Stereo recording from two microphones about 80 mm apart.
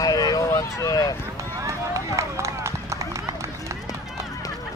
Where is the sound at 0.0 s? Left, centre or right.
Left.